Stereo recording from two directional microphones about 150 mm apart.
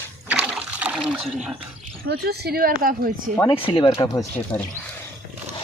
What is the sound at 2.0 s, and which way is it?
Speech, 90° right.